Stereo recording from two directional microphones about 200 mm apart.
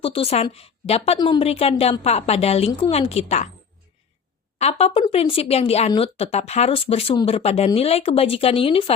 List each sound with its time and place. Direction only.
0.0 s speech: 30° left (ahead or behind)
4.5 s speech: 30° left (ahead or behind)